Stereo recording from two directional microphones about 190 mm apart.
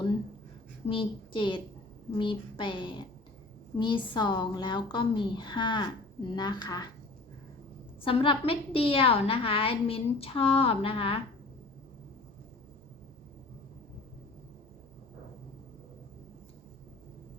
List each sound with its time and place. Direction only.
0.9 s a woman's voice: 30° left (ahead or behind)
8.0 s a woman's voice: 30° left (ahead or behind)